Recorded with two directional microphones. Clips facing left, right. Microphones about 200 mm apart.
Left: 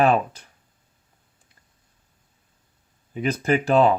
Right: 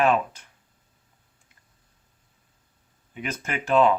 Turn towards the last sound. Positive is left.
turn(degrees=35)  # may be behind; listen again after turning